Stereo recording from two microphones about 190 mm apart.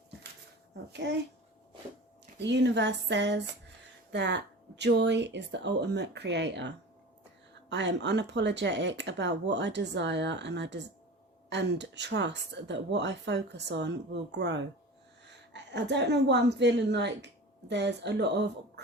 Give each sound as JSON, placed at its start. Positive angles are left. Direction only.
{"t": 1.0, "sound": "a woman's voice", "side_deg": -65}
{"t": 2.4, "sound": "a woman's voice", "side_deg": -65}